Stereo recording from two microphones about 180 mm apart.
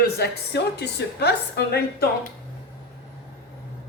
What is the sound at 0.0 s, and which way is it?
A woman's voice, 65° left (ahead or behind).